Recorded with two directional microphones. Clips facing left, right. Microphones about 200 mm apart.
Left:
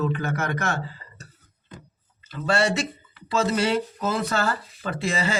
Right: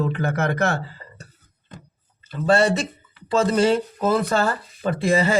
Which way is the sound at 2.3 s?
50° right (ahead or behind).